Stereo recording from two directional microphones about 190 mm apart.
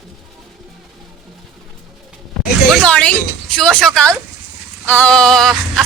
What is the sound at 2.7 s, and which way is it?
Speech, 5° left (ahead or behind).